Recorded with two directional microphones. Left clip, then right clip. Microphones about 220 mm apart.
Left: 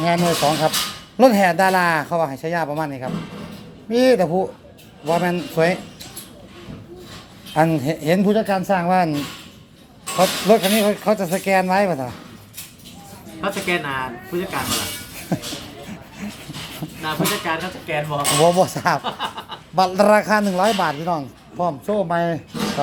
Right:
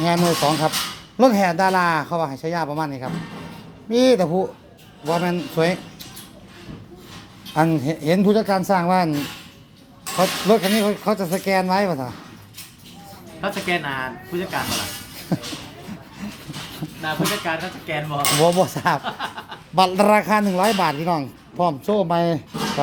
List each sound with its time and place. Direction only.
0.0 s speech: 10° right (ahead or behind)
7.5 s speech: centre (ahead or behind)
8.2 s speech: 10° right (ahead or behind)
10.2 s speech: centre (ahead or behind)
13.4 s speech: 10° right (ahead or behind)
16.2 s a sound: centre (ahead or behind)
17.0 s speech: 5° right (ahead or behind)
19.7 s speech: 15° right (ahead or behind)